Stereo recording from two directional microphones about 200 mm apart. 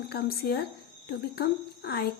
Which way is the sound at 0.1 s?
50° left (ahead or behind).